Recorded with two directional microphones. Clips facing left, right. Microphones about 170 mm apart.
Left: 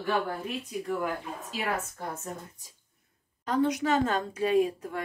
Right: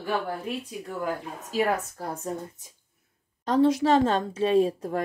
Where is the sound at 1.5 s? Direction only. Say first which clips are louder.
Right 7 dB; 35° right (ahead or behind).